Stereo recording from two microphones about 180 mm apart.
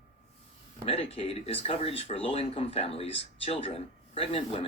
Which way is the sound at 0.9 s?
35° left (ahead or behind).